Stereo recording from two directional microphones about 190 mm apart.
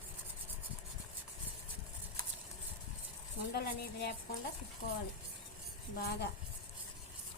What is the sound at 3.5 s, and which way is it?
Speech, 60° left (ahead or behind).